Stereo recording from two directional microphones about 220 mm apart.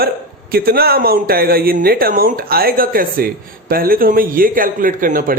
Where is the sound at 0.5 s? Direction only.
45° right (ahead or behind).